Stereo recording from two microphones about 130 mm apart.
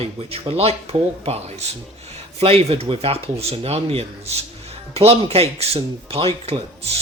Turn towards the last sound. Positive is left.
turn(degrees=-50)  # may be behind; listen again after turning